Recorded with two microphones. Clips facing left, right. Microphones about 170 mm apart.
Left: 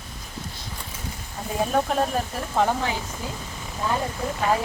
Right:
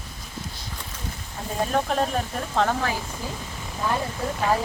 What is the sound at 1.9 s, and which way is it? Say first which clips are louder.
Speech: left 1 dB; 5° left (ahead or behind).